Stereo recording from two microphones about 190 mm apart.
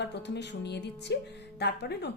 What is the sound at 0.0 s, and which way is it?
Music, 65° left (ahead or behind).